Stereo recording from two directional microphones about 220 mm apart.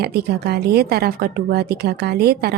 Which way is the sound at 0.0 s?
45° right (ahead or behind).